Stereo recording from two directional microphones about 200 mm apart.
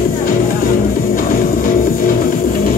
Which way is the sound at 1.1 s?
45° left (ahead or behind).